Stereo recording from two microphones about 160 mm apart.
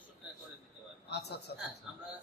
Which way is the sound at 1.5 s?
90° left.